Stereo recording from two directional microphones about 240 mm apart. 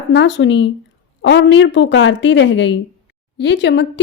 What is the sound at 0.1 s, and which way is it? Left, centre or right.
A woman's voice, left.